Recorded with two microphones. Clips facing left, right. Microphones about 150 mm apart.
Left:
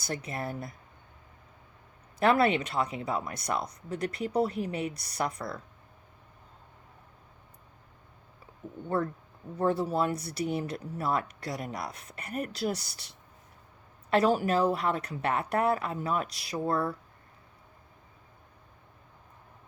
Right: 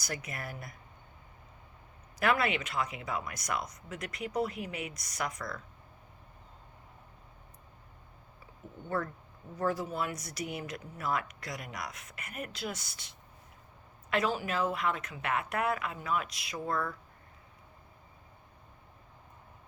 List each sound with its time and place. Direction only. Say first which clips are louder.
0.0 s speech: left 5 dB; 30° left (ahead or behind)
2.1 s speech: left 5 dB; 30° left (ahead or behind)
9.6 s speech: left 5 dB; 30° left (ahead or behind)
14.1 s speech: left 7 dB; 35° left (ahead or behind)